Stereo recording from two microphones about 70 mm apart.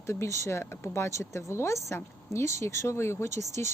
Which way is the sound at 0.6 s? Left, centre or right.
Left.